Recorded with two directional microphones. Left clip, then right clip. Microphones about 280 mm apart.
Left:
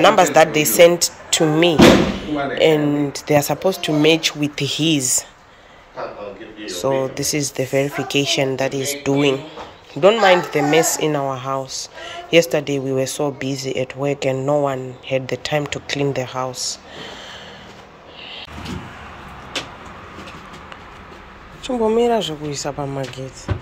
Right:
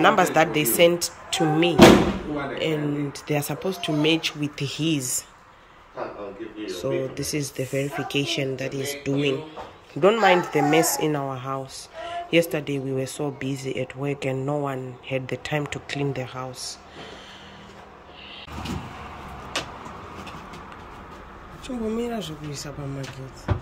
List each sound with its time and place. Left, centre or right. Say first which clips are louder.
0.0 s speech: left 6 dB; centre
6.6 s speech: left 7 dB; centre
21.6 s speech: left 13 dB; centre